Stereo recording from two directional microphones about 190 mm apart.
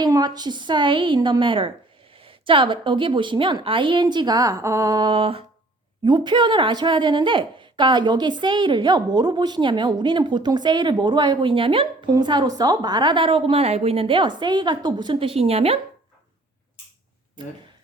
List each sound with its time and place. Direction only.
0.0 s a woman's voice: 20° right (ahead or behind)